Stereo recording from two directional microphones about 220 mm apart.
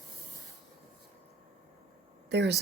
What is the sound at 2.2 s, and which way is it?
Speech, 50° right (ahead or behind).